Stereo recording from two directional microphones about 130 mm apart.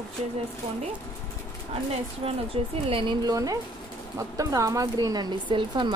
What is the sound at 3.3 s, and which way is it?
Speech, 25° right (ahead or behind).